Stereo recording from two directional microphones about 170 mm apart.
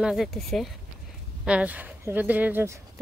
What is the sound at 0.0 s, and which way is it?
Speech, centre (ahead or behind).